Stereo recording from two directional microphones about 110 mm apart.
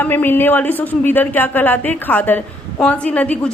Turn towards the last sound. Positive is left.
turn(degrees=10)  # may be behind; listen again after turning